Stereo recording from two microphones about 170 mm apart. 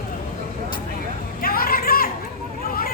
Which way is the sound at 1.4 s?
60° left (ahead or behind).